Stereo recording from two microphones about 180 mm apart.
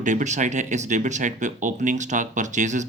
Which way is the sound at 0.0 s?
45° right (ahead or behind).